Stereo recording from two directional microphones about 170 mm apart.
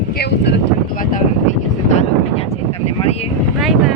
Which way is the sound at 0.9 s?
50° left (ahead or behind).